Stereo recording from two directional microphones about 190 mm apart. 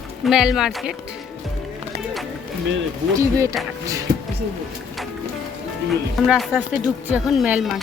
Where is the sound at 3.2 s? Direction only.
15° right (ahead or behind).